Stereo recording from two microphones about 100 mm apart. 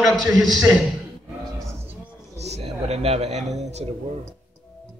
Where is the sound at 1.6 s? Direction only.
30° right (ahead or behind).